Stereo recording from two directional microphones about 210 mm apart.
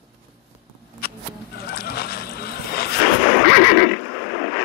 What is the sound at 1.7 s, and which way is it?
Boat, 50° left (ahead or behind).